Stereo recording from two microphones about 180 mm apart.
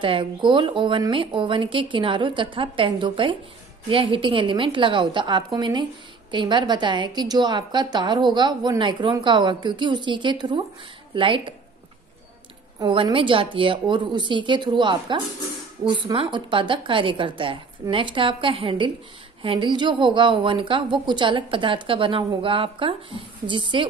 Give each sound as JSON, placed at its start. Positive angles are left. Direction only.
{"t": 0.0, "sound": "a woman's voice", "side_deg": -25}
{"t": 12.7, "sound": "a woman's voice", "side_deg": -30}